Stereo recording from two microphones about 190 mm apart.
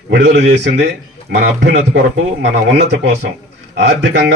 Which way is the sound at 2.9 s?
70° right (ahead or behind).